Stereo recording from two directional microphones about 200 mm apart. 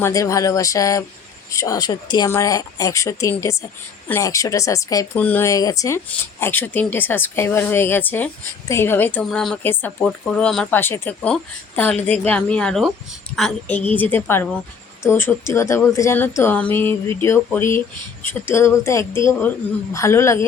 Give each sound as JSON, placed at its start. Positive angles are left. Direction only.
{"t": 0.0, "sound": "a woman's voice", "side_deg": 15}